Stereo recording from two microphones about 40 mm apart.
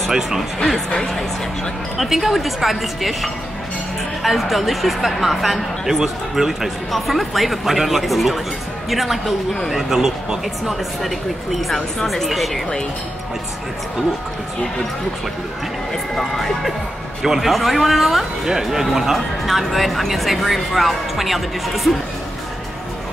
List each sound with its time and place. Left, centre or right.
0.7 s speech: centre
2.0 s speech: centre
10.7 s speech: centre
16.2 s speech: centre
17.2 s speech: centre